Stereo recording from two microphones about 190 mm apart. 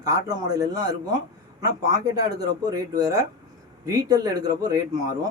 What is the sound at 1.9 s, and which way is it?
Speech, 20° right (ahead or behind).